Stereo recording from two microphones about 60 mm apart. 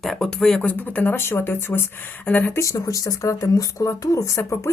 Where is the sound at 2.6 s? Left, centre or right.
Left.